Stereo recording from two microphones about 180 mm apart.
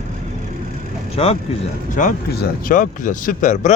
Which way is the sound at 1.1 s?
35° left (ahead or behind).